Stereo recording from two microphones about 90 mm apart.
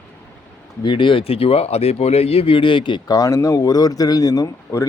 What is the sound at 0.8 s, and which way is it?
Speech, 60° left (ahead or behind).